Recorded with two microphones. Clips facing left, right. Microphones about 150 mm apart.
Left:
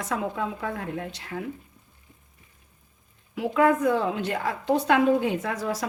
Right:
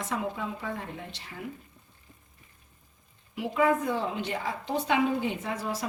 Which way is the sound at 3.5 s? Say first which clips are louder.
Left 5 dB; 85° left.